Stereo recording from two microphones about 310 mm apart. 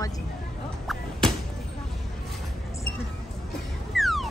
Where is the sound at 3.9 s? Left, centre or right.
Centre.